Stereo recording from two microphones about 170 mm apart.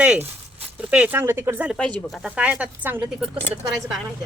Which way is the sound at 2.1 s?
5° right (ahead or behind).